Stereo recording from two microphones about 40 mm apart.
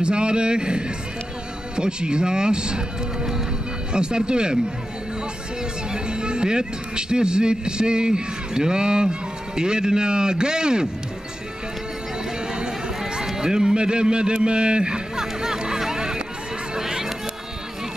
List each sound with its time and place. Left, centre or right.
0.0 s speech: right
5.9 s a man's voice: right
12.4 s run: right
13.0 s a sound: centre
16.7 s music: centre